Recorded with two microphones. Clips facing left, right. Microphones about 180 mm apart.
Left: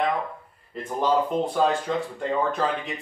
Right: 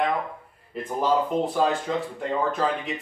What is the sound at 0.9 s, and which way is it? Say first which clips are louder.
Speech: even; centre (ahead or behind).